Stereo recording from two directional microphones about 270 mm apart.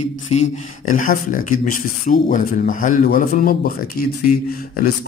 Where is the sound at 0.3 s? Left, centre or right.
Left.